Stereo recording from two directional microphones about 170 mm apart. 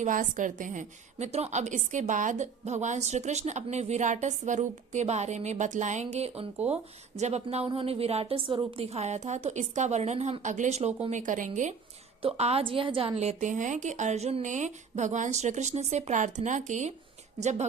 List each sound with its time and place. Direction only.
0.0 s a woman's voice: 50° right (ahead or behind)
12.2 s a woman's voice: 35° right (ahead or behind)